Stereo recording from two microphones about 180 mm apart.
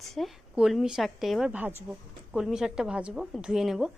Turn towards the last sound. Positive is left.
turn(degrees=0)  # may be behind; listen again after turning